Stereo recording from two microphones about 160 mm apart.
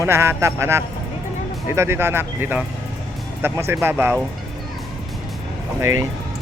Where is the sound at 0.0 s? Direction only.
15° right (ahead or behind).